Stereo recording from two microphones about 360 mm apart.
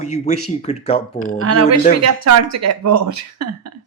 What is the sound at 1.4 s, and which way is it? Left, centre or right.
A woman's voice, right.